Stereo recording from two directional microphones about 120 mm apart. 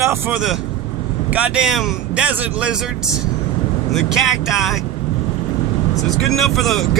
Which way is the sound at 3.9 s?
Centre (ahead or behind).